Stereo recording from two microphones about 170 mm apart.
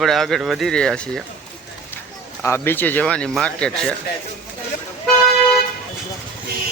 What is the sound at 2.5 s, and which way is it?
Speech, 10° left (ahead or behind).